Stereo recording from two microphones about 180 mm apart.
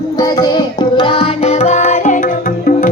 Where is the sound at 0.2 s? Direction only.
25° left (ahead or behind).